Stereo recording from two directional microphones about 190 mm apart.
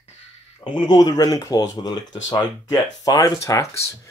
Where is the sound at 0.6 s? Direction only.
25° left (ahead or behind).